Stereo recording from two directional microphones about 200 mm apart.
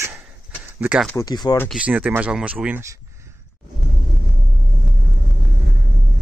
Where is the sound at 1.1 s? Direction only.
20° left (ahead or behind).